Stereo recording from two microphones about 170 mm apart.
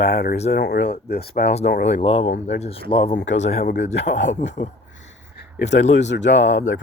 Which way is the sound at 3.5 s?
70° left (ahead or behind).